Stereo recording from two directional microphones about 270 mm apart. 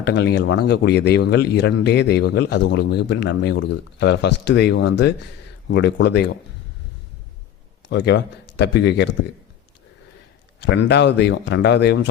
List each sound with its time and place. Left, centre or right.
0.0 s speech: left
7.9 s speech: left
10.6 s speech: left